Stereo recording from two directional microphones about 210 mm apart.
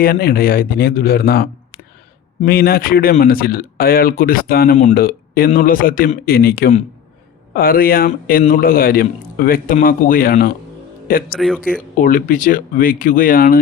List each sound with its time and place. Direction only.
0.0 s speech: 45° left (ahead or behind)
11.3 s speech: centre (ahead or behind)
11.9 s speech: 40° left (ahead or behind)